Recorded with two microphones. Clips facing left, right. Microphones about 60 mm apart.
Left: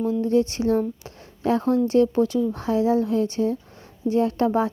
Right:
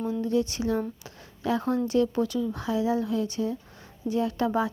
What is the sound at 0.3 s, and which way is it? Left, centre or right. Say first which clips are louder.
Speech: left 5 dB; left.